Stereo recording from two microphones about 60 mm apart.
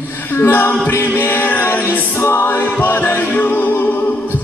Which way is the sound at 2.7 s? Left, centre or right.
Left.